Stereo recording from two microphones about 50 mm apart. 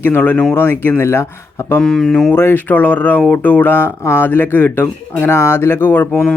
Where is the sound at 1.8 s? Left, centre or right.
Centre.